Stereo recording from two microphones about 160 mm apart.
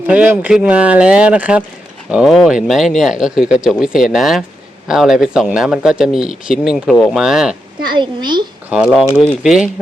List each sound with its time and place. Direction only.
0.1 s speech: 10° right (ahead or behind)
7.9 s a woman's voice: 30° right (ahead or behind)
8.7 s speech: centre (ahead or behind)